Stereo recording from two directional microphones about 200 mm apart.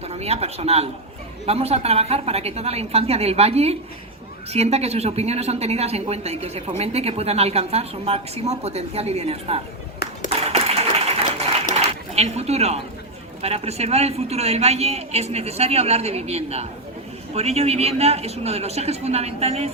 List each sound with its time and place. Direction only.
0.1 s speech: 30° right (ahead or behind)
10.6 s a sound: 30° right (ahead or behind)
13.4 s speech: 30° right (ahead or behind)